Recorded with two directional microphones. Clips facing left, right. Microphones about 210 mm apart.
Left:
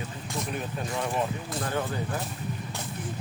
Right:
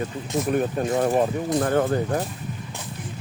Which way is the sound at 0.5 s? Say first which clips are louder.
Right 12 dB; 50° right (ahead or behind).